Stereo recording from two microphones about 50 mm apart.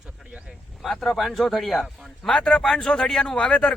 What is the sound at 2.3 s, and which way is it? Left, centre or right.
Speech, centre.